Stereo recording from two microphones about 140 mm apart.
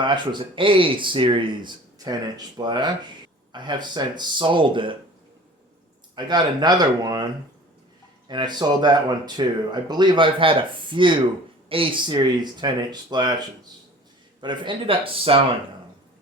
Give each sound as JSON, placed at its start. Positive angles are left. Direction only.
{"t": 0.0, "sound": "speech", "side_deg": -35}
{"t": 6.1, "sound": "speech", "side_deg": -30}
{"t": 8.3, "sound": "speech", "side_deg": -30}
{"t": 14.4, "sound": "speech", "side_deg": -35}